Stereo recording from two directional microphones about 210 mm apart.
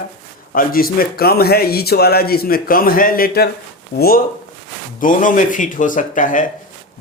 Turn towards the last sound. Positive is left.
turn(degrees=40)  # may be behind; listen again after turning